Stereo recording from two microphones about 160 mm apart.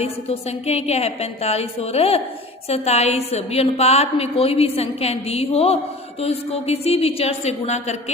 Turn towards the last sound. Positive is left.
turn(degrees=45)  # may be behind; listen again after turning